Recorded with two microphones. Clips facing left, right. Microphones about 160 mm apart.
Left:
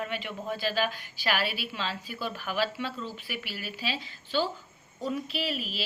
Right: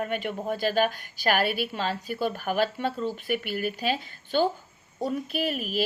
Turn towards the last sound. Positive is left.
turn(degrees=-50)  # may be behind; listen again after turning